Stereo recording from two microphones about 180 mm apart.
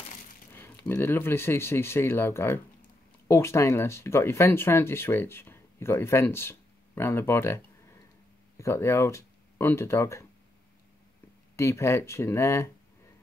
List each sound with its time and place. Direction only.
0.6 s speech: 10° left (ahead or behind)
11.5 s speech: 15° left (ahead or behind)